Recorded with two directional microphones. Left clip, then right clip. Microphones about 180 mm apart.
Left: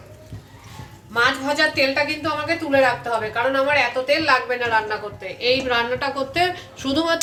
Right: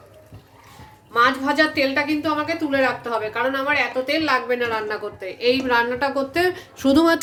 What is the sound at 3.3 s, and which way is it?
Speech, 75° right (ahead or behind).